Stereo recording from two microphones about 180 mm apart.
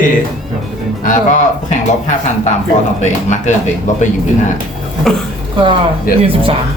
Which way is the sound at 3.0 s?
40° left (ahead or behind).